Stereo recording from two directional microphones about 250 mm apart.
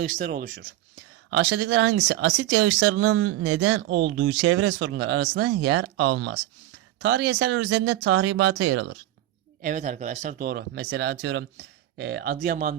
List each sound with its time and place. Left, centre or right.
0.0 s speech: right
1.3 s speech: right
4.2 s speech: right
9.6 s speech: right